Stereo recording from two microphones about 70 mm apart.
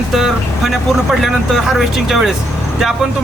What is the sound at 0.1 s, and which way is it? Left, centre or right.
A man's voice, centre.